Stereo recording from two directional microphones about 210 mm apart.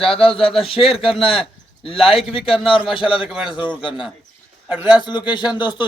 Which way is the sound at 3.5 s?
25° left (ahead or behind).